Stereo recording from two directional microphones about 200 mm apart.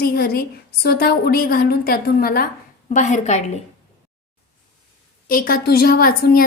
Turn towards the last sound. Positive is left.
turn(degrees=45)  # may be behind; listen again after turning